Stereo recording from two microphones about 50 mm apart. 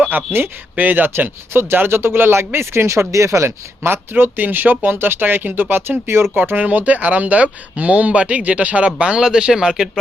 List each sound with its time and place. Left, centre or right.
0.3 s speech: right
0.8 s speech: right
3.8 s speech: right
9.0 s speech: centre